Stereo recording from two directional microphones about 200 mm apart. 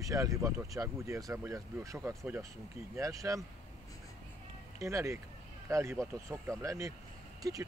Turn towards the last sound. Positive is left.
turn(degrees=-15)  # may be behind; listen again after turning